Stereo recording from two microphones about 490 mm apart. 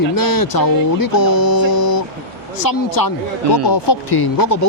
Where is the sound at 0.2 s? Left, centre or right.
Left.